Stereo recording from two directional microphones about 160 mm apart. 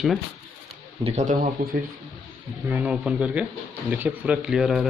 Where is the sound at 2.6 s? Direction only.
10° right (ahead or behind).